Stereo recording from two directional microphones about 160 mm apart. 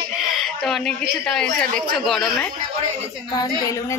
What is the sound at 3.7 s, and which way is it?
Speech, 20° left (ahead or behind).